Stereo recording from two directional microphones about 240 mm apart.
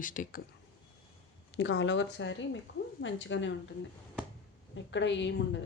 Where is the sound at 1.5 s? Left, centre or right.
Left.